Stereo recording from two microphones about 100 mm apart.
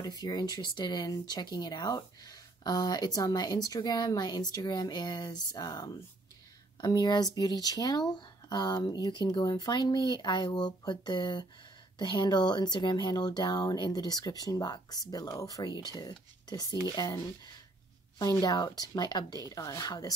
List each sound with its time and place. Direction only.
0.0 s speech: 40° left (ahead or behind)
18.4 s speech: 40° left (ahead or behind)